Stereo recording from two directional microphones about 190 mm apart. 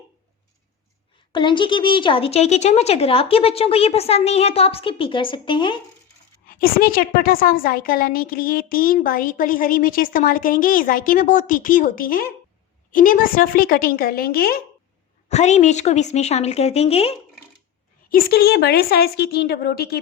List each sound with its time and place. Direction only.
1.3 s a woman's voice: 25° left (ahead or behind)
6.5 s a woman's voice: 50° left (ahead or behind)
15.3 s a woman's voice: 35° left (ahead or behind)
18.1 s a woman's voice: 55° left (ahead or behind)